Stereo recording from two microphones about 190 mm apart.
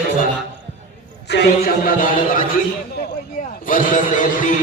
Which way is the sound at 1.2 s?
60° left (ahead or behind).